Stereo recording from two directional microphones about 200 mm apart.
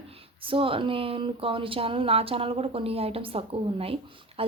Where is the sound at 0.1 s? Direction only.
25° right (ahead or behind).